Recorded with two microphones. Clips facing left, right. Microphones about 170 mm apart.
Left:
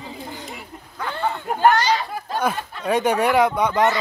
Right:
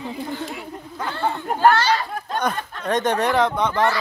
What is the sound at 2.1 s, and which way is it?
Speech, 5° left (ahead or behind).